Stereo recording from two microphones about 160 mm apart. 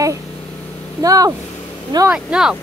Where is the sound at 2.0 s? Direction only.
5° right (ahead or behind).